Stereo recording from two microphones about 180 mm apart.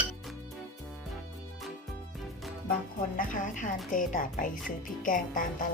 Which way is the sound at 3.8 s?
45° left (ahead or behind).